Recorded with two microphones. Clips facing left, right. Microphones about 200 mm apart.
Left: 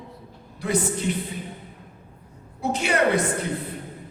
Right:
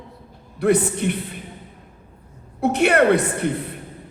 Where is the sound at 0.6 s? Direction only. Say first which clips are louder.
Right 6 dB; 60° right (ahead or behind).